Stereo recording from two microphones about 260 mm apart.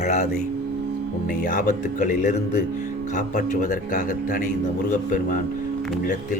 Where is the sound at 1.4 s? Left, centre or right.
Left.